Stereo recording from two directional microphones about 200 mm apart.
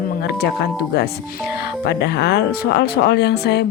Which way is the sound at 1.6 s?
55° left (ahead or behind).